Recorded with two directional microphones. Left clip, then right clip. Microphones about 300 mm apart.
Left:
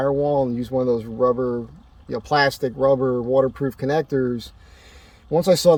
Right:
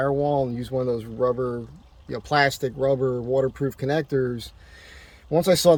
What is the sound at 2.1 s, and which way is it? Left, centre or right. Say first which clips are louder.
Speech: left 2 dB; centre.